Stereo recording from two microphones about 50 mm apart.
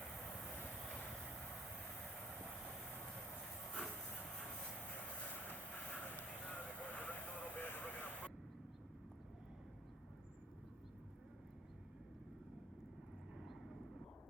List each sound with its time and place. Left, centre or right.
5.2 s vehicle: left